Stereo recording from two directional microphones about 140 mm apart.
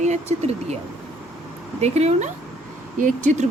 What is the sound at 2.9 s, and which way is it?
Speech, 65° right (ahead or behind).